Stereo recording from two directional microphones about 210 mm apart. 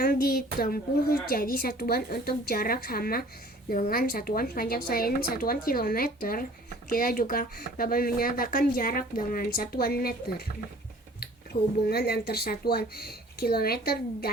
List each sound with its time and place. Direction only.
0.0 s speech: 45° left (ahead or behind)
11.5 s speech: 45° left (ahead or behind)